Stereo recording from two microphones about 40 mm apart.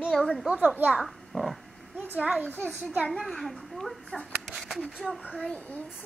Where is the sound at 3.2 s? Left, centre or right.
Centre.